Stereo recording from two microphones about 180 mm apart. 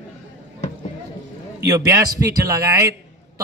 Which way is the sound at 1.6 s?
15° right (ahead or behind).